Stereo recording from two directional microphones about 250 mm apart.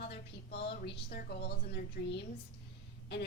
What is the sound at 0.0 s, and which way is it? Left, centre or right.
A woman's voice, left.